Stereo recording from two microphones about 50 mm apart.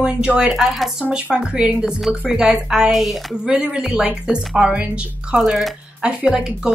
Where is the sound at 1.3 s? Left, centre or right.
Centre.